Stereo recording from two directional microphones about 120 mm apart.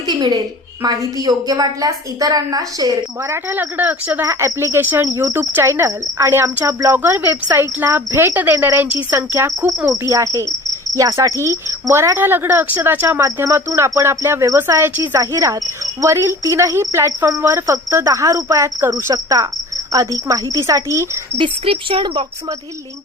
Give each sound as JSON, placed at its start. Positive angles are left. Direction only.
{"t": 0.1, "sound": "a woman's voice", "side_deg": -35}
{"t": 4.3, "sound": "speech", "side_deg": -25}
{"t": 21.3, "sound": "speech", "side_deg": -50}